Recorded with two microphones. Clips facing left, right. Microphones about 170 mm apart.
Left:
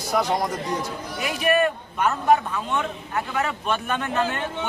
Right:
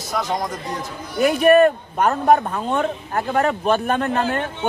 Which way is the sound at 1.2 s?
45° right (ahead or behind).